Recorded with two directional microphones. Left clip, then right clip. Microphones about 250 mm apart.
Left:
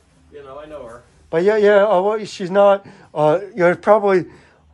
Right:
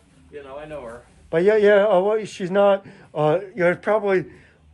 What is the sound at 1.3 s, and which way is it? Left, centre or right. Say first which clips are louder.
Speech: left 2 dB; centre.